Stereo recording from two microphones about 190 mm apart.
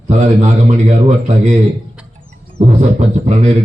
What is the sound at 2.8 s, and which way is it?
Speech, 35° right (ahead or behind).